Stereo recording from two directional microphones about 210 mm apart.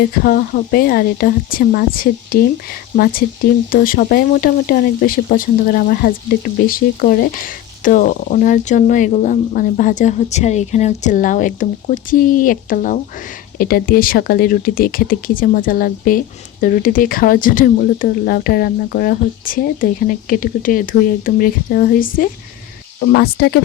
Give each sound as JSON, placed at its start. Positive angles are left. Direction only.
{"t": 0.0, "sound": "speech", "side_deg": 45}